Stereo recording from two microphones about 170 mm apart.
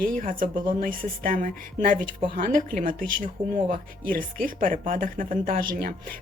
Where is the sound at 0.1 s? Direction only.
55° right (ahead or behind).